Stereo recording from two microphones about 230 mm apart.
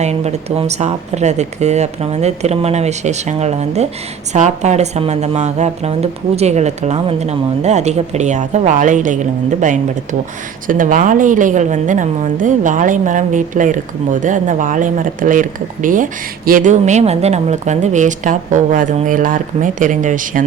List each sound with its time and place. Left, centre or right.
0.0 s a woman's voice: right